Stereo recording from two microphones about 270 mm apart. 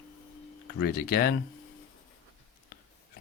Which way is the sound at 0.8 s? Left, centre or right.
Left.